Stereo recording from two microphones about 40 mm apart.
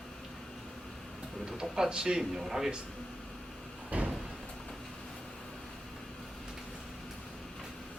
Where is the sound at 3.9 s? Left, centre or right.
Right.